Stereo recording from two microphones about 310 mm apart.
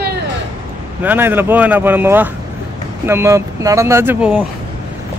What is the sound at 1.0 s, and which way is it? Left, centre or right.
Speech, centre.